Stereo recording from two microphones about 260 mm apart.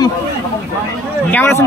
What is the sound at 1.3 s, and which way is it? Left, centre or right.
Speech, centre.